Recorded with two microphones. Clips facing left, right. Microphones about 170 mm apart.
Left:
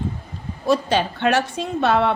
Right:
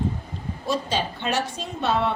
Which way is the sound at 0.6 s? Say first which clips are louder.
Left 7 dB; 65° left (ahead or behind).